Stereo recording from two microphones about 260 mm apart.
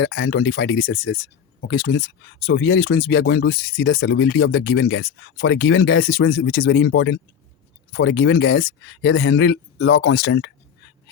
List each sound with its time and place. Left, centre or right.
0.0 s speech: left